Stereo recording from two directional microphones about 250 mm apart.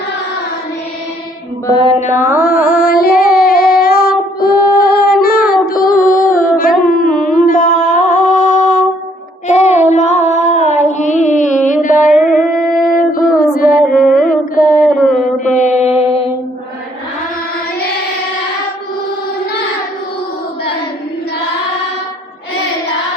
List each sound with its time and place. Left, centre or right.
2.0 s carnatic music: left
2.7 s female singing: left
5.6 s music: left
9.5 s child singing: left
9.9 s music: left
12.2 s music: centre
12.9 s music: left
13.6 s female singing: left
14.1 s a sound: left
15.8 s mantra: left